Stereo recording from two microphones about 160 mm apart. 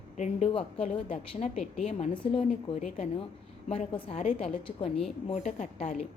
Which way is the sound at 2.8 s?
45° left (ahead or behind).